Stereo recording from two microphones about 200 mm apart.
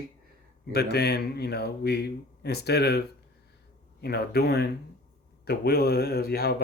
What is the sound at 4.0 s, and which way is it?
A man's voice, 55° left (ahead or behind).